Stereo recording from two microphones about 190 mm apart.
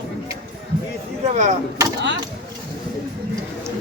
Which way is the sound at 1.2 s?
40° right (ahead or behind).